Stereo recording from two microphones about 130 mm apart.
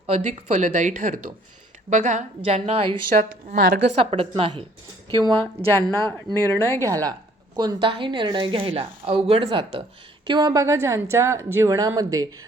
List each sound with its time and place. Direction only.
0.1 s speech: 60° right (ahead or behind); by 1.2 s 85° right
1.9 s a woman's voice: 70° right (ahead or behind); by 2.8 s 55° right (ahead or behind)
3.2 s speech: 90° right
3.9 s a woman's voice: 50° right (ahead or behind)
5.7 s a woman's voice: 20° left (ahead or behind)
6.8 s a woman's voice: 25° right (ahead or behind)